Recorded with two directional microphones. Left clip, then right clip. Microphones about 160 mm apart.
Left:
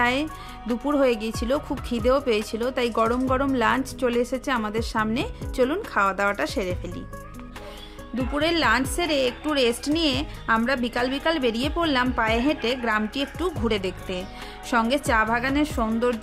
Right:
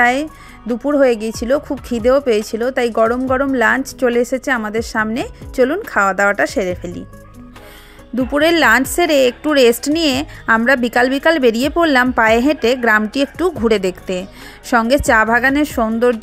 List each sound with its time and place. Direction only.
0.0 s a woman's voice: 25° right (ahead or behind)
8.2 s speech: 40° right (ahead or behind)